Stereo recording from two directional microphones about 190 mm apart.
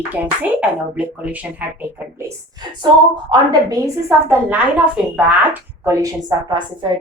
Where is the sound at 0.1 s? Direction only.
10° right (ahead or behind).